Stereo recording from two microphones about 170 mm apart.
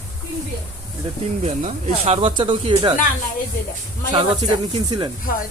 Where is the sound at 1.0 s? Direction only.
35° right (ahead or behind).